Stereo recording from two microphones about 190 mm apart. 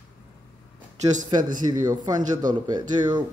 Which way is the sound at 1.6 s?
20° right (ahead or behind).